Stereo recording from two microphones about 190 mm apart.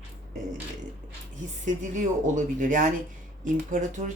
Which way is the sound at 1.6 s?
40° right (ahead or behind).